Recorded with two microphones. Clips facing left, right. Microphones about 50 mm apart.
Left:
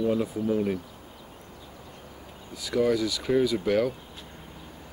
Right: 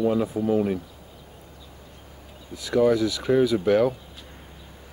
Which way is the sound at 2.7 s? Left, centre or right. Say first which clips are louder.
Right 4 dB; centre.